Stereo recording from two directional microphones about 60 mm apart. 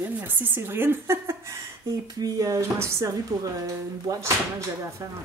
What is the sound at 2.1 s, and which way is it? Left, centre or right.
Speech, right.